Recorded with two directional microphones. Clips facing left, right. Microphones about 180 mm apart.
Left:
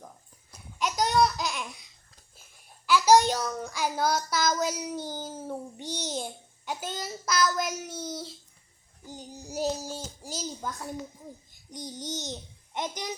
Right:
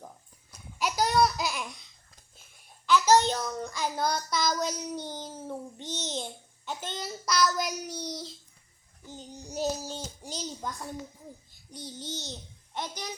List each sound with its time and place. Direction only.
0.8 s a sound: 5° right (ahead or behind)
2.8 s child singing: 10° left (ahead or behind)
9.0 s a child's voice: 10° left (ahead or behind)
11.7 s a child's voice: 15° left (ahead or behind)